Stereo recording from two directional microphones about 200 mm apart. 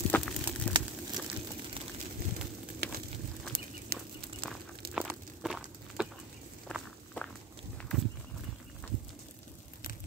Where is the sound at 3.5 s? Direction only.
50° right (ahead or behind).